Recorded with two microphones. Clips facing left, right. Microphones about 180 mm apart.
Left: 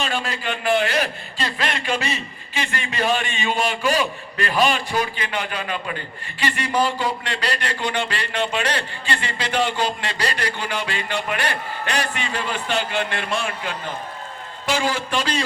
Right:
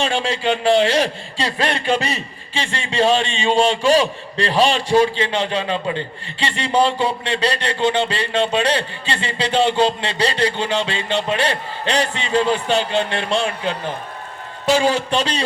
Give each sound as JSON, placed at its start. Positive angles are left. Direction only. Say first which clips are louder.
{"t": 0.0, "sound": "speech", "louder": "right 6 dB", "side_deg": -30}
{"t": 2.6, "sound": "speech", "louder": "right 5 dB", "side_deg": -30}
{"t": 14.7, "sound": "speech", "louder": "right 6 dB", "side_deg": -25}